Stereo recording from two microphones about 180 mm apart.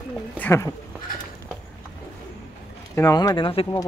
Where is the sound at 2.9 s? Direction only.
20° left (ahead or behind).